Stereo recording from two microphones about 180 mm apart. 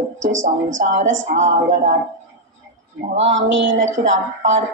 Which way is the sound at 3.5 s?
90° right.